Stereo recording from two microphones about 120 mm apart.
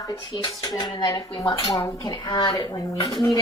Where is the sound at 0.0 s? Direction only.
30° left (ahead or behind).